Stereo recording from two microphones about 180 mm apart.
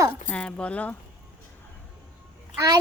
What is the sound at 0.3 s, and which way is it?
Speech, 5° left (ahead or behind).